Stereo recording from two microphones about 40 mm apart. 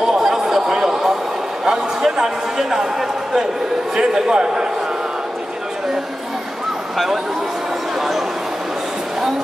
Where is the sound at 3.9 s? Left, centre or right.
Centre.